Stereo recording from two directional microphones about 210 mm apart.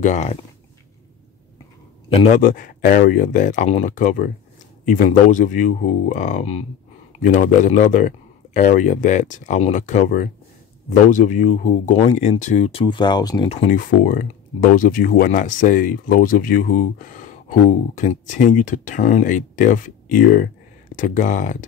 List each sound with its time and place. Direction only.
0.0 s speech: 35° left (ahead or behind)
2.0 s speech: 30° left (ahead or behind)
13.5 s speech: 35° left (ahead or behind)